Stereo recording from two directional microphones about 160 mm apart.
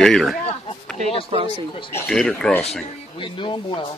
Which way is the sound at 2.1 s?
5° left (ahead or behind).